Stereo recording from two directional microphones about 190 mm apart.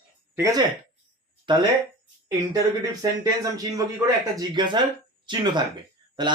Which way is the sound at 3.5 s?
20° right (ahead or behind).